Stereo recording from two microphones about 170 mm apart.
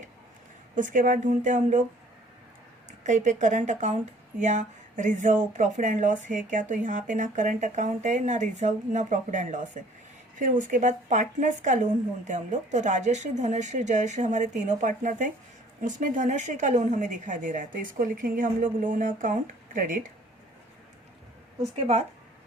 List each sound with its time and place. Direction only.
0.8 s speech: 50° right (ahead or behind)
3.0 s speech: 45° right (ahead or behind)